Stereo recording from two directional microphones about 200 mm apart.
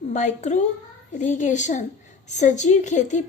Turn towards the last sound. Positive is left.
turn(degrees=35)  # may be behind; listen again after turning